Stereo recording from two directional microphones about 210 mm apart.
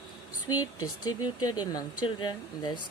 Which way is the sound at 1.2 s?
20° left (ahead or behind).